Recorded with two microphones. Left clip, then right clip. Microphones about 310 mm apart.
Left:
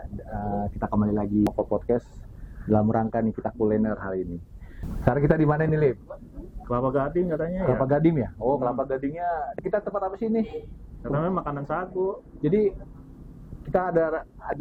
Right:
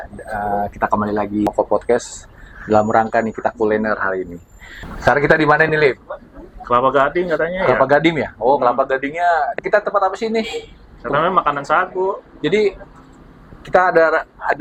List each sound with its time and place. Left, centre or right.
0.0 s speech: centre
1.5 s speech: centre
2.6 s speech: centre